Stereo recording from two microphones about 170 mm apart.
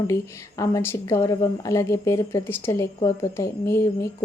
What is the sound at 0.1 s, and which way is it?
A woman's voice, 20° left (ahead or behind).